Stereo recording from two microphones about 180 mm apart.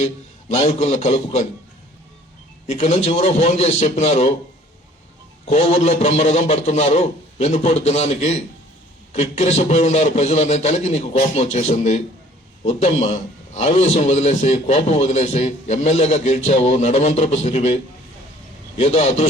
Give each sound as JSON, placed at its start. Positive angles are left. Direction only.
{"t": 0.0, "sound": "a man's voice", "side_deg": 35}
{"t": 2.6, "sound": "a man's voice", "side_deg": 35}
{"t": 5.5, "sound": "a man's voice", "side_deg": 40}
{"t": 18.8, "sound": "a man's voice", "side_deg": 35}